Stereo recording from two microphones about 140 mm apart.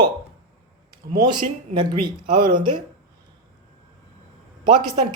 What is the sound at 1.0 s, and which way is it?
Speech, 75° right (ahead or behind).